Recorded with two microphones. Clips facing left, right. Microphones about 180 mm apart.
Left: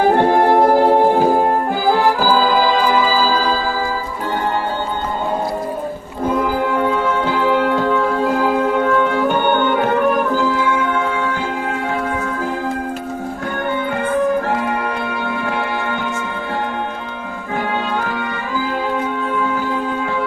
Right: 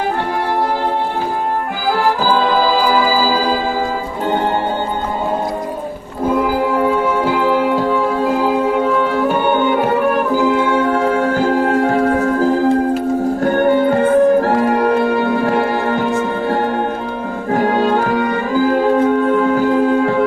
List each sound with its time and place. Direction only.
0.2 s music: 55° left (ahead or behind)
2.2 s organ: 5° left (ahead or behind); by 3.6 s 15° right (ahead or behind)
6.2 s music: 5° right (ahead or behind)
10.3 s music: 20° right (ahead or behind); by 20.2 s 40° right (ahead or behind)